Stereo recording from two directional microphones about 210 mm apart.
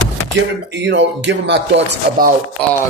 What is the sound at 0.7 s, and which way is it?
Speech, 55° right (ahead or behind).